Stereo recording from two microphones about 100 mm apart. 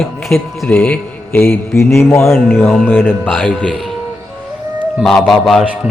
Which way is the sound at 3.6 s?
Centre (ahead or behind).